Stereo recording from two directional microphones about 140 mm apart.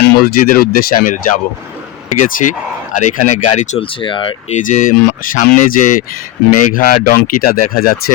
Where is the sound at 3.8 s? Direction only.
35° left (ahead or behind).